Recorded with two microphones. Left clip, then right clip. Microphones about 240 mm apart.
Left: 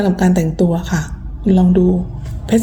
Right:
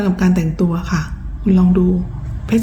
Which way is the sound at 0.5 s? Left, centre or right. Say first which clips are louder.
Left 4 dB; right.